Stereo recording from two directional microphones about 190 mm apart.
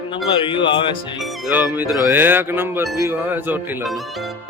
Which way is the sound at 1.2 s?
Centre (ahead or behind).